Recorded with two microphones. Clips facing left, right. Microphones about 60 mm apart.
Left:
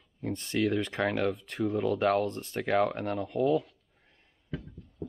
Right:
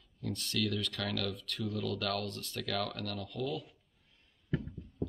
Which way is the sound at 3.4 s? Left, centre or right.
Left.